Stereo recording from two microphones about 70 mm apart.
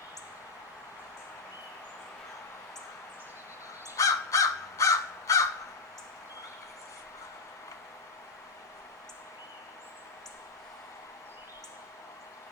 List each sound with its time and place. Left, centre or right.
3.9 s crow: left